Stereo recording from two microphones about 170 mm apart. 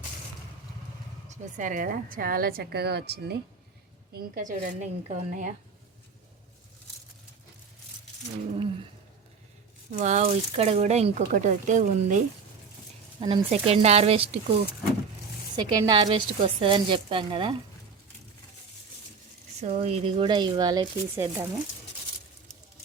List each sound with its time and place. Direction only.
1.3 s a woman's voice: 50° right (ahead or behind); by 3.3 s 75° right (ahead or behind)
4.1 s speech: 50° right (ahead or behind)
10.0 s speech: 45° right (ahead or behind)
13.1 s speech: 30° right (ahead or behind)
15.5 s speech: 25° right (ahead or behind)
19.6 s speech: 40° right (ahead or behind); by 21.4 s 20° right (ahead or behind)